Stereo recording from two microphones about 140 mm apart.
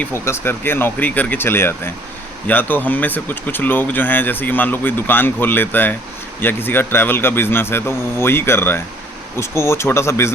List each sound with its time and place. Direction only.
0.0 s speech: 15° left (ahead or behind)